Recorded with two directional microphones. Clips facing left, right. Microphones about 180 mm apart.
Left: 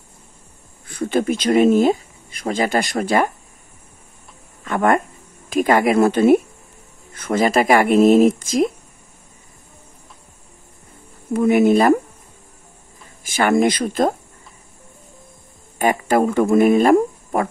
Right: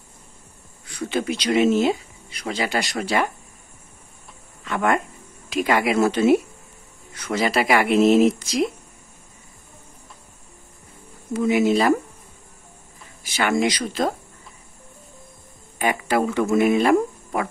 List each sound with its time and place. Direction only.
0.8 s speech: 50° left (ahead or behind)
4.6 s speech: 50° left (ahead or behind)
11.3 s speech: 55° left (ahead or behind)
13.2 s speech: 50° left (ahead or behind)
15.8 s speech: 45° left (ahead or behind)